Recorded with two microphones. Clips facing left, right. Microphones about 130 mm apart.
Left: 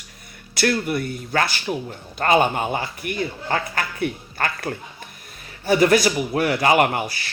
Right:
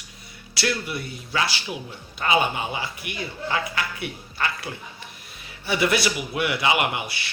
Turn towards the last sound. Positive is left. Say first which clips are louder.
# left 6 dB
turn(degrees=45)  # may be behind; listen again after turning